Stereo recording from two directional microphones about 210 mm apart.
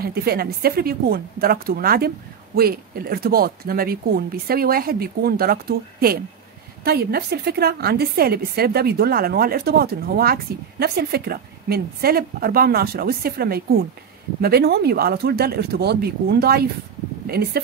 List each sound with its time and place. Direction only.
0.0 s a woman's voice: 50° right (ahead or behind)